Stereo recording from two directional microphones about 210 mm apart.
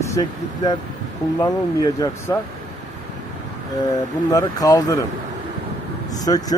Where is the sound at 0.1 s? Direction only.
20° left (ahead or behind).